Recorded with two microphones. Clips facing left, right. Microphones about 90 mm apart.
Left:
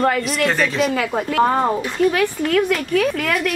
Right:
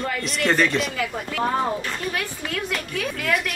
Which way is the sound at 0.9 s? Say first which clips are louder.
Left 8 dB; 85° left.